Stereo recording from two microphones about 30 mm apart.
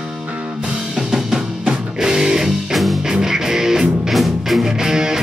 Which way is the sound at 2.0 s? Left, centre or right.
Centre.